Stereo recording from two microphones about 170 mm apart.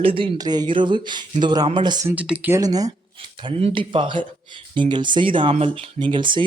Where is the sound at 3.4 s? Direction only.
35° right (ahead or behind).